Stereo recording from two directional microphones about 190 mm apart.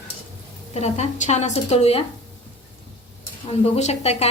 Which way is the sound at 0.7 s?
35° left (ahead or behind).